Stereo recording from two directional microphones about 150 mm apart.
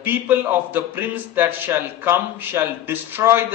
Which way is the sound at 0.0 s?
15° right (ahead or behind).